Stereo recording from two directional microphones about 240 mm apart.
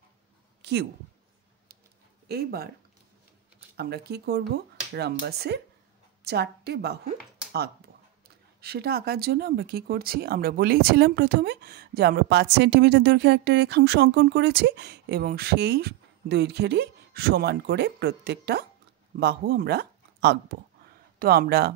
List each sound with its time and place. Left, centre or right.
0.6 s a sound: right
2.2 s speech: right
3.7 s a woman's voice: right
8.5 s speech: right